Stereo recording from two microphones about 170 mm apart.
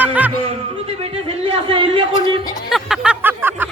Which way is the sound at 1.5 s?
30° right (ahead or behind).